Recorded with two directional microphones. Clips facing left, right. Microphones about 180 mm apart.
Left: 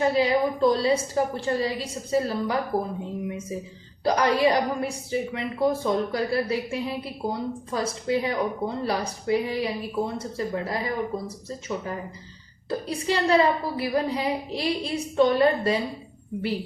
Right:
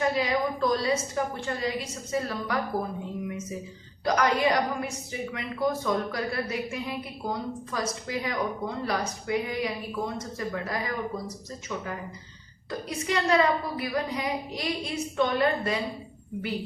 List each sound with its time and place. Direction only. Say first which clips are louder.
0.0 s a woman's voice: left 4 dB; 30° left (ahead or behind)
4.0 s a woman's voice: left 3 dB; 30° left (ahead or behind)
12.9 s a woman's voice: left 3 dB; 30° left (ahead or behind)